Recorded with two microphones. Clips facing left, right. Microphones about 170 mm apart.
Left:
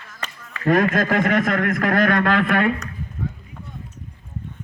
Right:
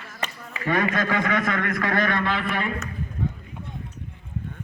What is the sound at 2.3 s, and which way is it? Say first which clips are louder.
Speech: left 8 dB; 75° left (ahead or behind).